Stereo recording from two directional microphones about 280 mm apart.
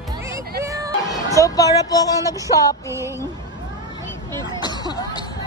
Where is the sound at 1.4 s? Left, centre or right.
Centre.